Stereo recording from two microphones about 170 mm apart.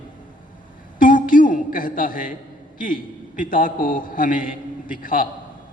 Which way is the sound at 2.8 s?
50° left (ahead or behind).